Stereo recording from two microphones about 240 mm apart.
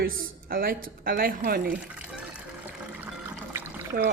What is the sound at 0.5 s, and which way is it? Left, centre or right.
A woman's voice, right.